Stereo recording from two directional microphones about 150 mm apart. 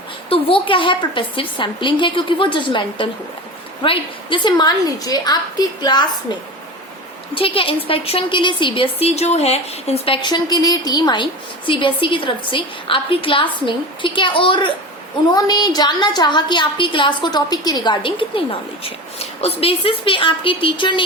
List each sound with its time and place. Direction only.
0.3 s a woman's voice: 35° left (ahead or behind)
7.3 s a woman's voice: 35° left (ahead or behind)